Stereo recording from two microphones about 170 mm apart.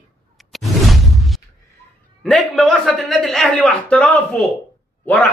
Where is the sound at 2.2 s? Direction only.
Centre (ahead or behind).